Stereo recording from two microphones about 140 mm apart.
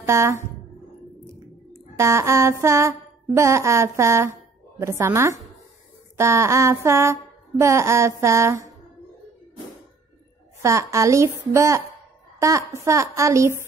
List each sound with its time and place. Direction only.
0.0 s mantra: 20° right (ahead or behind)
1.7 s a woman's voice: 20° right (ahead or behind)
6.1 s mantra: 20° right (ahead or behind)
10.6 s mantra: 20° right (ahead or behind)